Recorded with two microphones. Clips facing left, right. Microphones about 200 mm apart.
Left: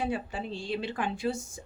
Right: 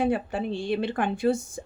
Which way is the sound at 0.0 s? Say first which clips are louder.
Right 7 dB; 55° right (ahead or behind).